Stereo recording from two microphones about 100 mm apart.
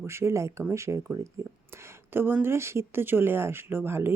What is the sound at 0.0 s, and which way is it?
Speech, 25° right (ahead or behind).